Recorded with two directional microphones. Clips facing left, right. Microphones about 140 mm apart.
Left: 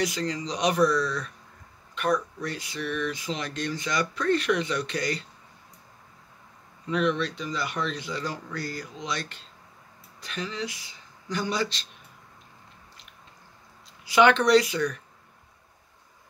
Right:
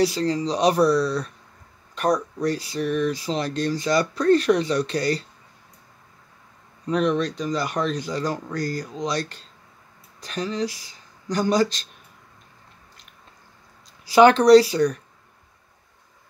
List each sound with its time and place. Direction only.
0.0 s speech: 35° right (ahead or behind)
6.9 s speech: 40° right (ahead or behind)
14.0 s speech: 35° right (ahead or behind)